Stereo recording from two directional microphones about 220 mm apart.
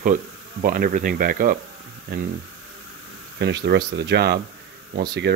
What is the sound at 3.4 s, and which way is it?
Speech, 50° right (ahead or behind).